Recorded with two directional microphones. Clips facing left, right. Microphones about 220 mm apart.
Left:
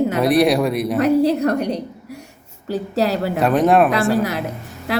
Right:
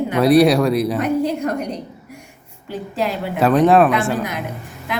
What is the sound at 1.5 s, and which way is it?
A woman's voice, 35° left (ahead or behind).